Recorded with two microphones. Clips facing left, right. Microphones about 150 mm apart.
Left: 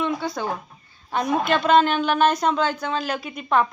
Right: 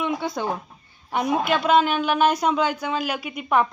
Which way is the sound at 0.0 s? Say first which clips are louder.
Even; 15° right (ahead or behind).